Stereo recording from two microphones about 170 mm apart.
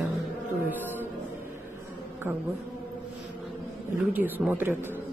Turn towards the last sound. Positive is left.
turn(degrees=-10)  # may be behind; listen again after turning